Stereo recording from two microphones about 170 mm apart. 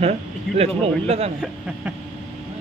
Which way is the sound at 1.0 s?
35° right (ahead or behind).